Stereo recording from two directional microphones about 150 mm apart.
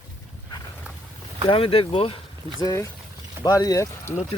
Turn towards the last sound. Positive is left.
turn(degrees=20)  # may be behind; listen again after turning